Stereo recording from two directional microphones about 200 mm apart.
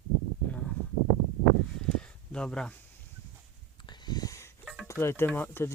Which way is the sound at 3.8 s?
20° left (ahead or behind).